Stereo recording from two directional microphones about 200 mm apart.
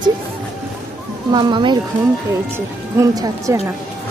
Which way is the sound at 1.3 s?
20° right (ahead or behind).